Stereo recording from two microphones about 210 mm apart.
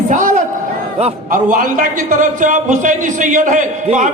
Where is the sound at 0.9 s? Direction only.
35° right (ahead or behind).